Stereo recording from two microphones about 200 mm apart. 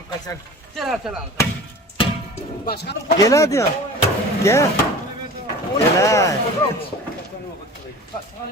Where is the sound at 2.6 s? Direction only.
55° left (ahead or behind).